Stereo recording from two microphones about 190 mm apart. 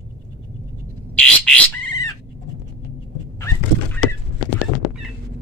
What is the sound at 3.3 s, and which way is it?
Dog, 15° left (ahead or behind).